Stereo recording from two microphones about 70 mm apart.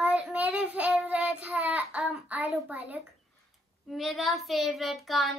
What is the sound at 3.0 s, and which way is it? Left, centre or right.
Child singing, centre.